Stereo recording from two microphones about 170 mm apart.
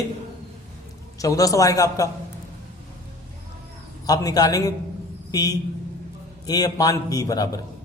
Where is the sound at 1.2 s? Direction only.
20° left (ahead or behind).